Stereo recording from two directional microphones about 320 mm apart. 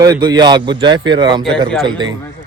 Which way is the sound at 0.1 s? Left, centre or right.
Centre.